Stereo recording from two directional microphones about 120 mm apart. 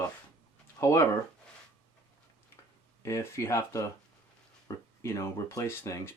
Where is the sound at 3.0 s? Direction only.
25° left (ahead or behind).